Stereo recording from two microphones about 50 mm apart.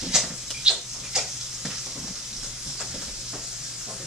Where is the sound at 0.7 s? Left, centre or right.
Centre.